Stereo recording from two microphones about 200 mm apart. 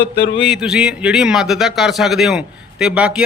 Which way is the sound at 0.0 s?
60° left (ahead or behind).